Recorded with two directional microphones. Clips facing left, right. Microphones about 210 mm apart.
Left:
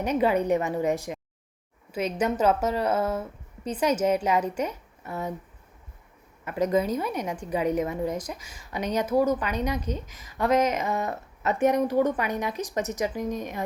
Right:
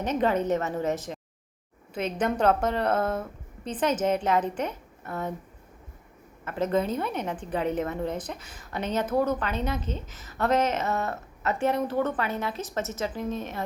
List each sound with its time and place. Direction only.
0.0 s a woman's voice: 10° left (ahead or behind)
6.4 s a woman's voice: 10° left (ahead or behind)